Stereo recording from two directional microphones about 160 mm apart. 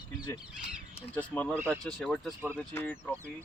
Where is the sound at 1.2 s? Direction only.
10° left (ahead or behind).